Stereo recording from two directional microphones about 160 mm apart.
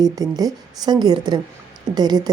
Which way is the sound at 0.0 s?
25° right (ahead or behind).